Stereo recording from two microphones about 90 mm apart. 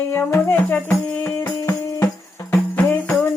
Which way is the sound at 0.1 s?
25° left (ahead or behind).